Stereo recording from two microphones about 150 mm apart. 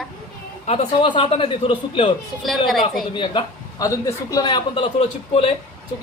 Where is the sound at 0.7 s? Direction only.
40° left (ahead or behind).